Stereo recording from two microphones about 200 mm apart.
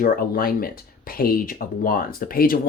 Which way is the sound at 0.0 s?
45° left (ahead or behind).